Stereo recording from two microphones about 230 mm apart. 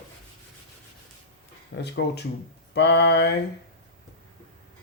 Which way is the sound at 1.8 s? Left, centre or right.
Left.